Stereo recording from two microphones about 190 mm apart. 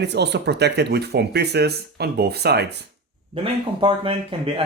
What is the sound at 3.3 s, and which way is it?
Speech, 30° right (ahead or behind).